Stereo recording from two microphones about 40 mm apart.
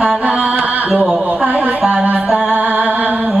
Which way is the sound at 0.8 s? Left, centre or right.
Right.